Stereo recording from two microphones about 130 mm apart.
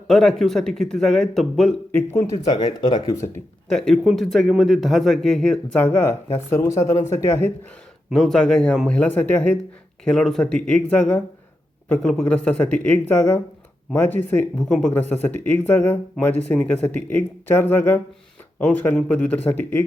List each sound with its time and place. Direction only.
0.1 s a man's voice: 5° left (ahead or behind)
1.9 s speech: 15° left (ahead or behind)
2.3 s speech: 35° left (ahead or behind)
3.7 s a man's voice: 5° left (ahead or behind)
5.8 s a man's voice: 15° left (ahead or behind)
8.1 s a man's voice: centre (ahead or behind)